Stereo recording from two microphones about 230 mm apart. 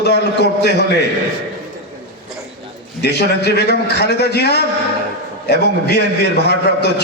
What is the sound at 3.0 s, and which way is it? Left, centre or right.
A man's voice, left.